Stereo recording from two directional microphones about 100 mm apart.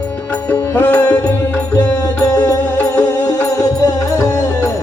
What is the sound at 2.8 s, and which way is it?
Music, 15° left (ahead or behind).